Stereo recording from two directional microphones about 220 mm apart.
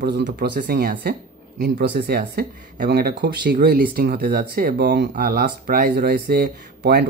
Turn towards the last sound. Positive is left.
turn(degrees=-45)  # may be behind; listen again after turning